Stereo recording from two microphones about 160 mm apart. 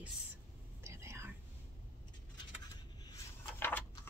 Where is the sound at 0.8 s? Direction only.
15° right (ahead or behind).